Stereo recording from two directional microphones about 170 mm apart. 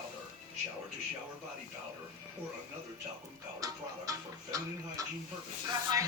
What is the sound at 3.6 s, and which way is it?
Chicken, 20° right (ahead or behind).